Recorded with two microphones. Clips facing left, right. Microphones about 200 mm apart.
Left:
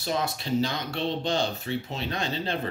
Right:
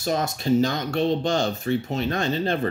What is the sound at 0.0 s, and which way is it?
Speech, 45° right (ahead or behind).